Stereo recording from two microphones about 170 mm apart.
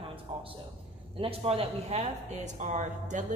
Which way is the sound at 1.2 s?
35° right (ahead or behind).